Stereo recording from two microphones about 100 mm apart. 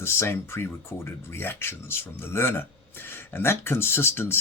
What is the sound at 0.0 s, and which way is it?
Speech, 25° left (ahead or behind).